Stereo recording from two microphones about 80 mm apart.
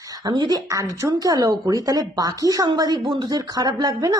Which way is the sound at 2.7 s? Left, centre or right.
Right.